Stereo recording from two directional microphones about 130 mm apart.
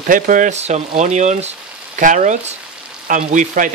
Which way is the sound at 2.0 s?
80° right.